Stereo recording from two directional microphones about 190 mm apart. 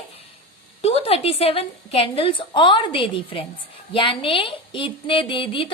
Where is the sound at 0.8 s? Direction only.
30° left (ahead or behind).